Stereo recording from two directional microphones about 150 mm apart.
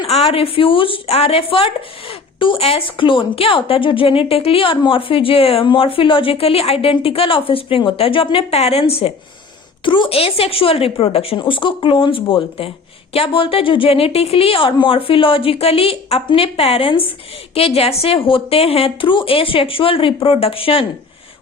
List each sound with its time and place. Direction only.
0.1 s a woman's voice: 45° left (ahead or behind)